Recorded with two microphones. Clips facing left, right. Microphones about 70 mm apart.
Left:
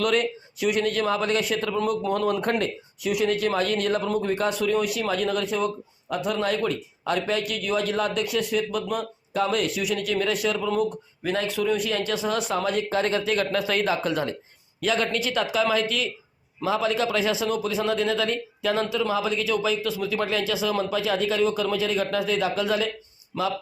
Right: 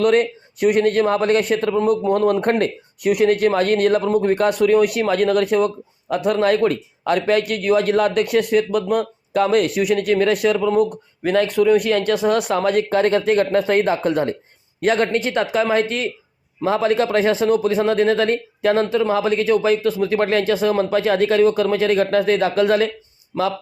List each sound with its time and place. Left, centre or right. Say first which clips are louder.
0.0 s a man's voice: right 7 dB; right
23.3 s a man's voice: right 6 dB; right